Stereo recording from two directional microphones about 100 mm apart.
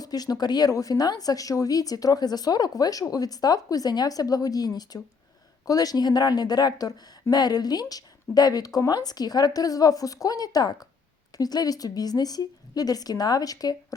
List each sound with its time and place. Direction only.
0.0 s a woman's voice: 40° left (ahead or behind)